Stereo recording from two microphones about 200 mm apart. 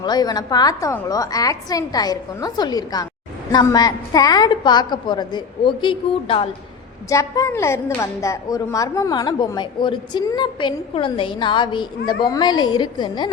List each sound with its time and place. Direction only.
0.0 s a woman's voice: 20° left (ahead or behind)
7.1 s a woman's voice: 15° left (ahead or behind)